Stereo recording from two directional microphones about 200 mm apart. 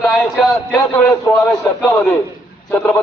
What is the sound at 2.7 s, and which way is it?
Speech, 5° left (ahead or behind).